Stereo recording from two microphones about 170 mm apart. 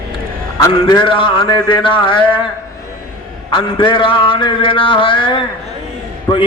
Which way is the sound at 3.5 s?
30° left (ahead or behind).